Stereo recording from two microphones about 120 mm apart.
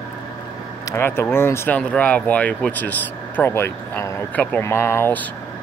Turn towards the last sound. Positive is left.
turn(degrees=20)  # may be behind; listen again after turning